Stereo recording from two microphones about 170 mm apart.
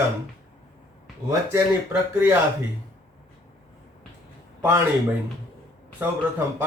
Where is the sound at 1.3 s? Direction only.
15° right (ahead or behind).